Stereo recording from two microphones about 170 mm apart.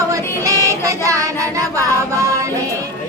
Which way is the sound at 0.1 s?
20° right (ahead or behind).